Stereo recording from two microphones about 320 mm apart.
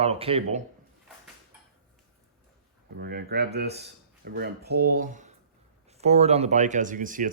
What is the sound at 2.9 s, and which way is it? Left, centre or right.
Speech, right.